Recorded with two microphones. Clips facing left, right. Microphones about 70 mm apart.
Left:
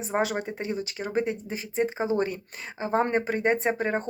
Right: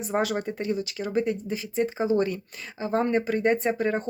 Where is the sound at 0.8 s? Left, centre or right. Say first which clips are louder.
Right 1 dB; left.